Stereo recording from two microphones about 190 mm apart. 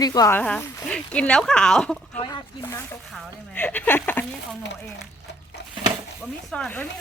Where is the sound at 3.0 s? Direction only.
Centre (ahead or behind).